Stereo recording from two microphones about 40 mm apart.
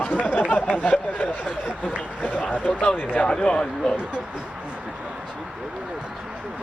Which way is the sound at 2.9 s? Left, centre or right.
Left.